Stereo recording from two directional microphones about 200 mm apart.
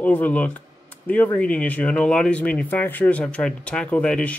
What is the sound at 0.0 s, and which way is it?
Speech, 10° left (ahead or behind).